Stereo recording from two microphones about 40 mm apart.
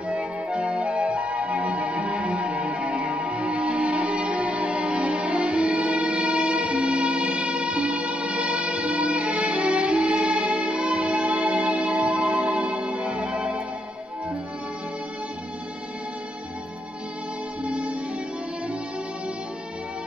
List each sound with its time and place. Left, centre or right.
0.1 s music: right
17.6 s music: right